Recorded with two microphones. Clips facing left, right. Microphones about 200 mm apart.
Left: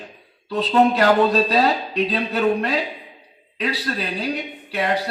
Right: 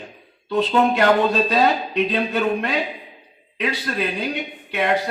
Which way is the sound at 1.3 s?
35° left (ahead or behind).